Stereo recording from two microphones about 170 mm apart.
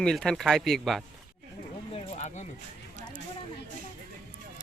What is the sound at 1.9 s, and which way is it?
Speech, 40° left (ahead or behind).